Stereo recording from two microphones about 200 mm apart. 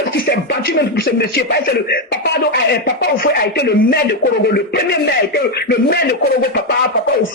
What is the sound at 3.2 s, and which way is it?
Speech, 50° left (ahead or behind).